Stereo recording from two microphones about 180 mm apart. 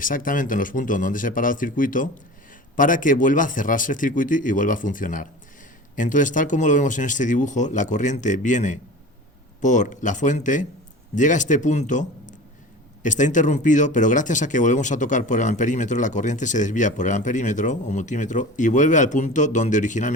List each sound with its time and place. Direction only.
0.0 s speech: 50° left (ahead or behind)